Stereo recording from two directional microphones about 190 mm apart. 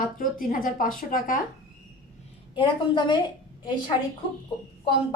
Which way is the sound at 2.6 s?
25° left (ahead or behind).